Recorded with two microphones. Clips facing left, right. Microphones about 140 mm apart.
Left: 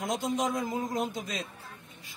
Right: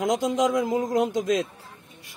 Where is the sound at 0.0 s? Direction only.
90° right.